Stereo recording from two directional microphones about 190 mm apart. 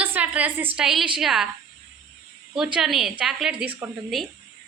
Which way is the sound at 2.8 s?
Centre (ahead or behind).